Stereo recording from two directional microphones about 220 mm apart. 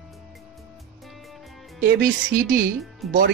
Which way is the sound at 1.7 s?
45° right (ahead or behind).